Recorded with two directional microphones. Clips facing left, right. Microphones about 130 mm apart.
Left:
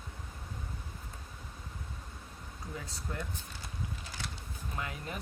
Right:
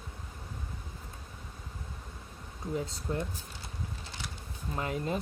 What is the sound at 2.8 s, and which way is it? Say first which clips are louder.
Speech: right 7 dB; 25° right (ahead or behind).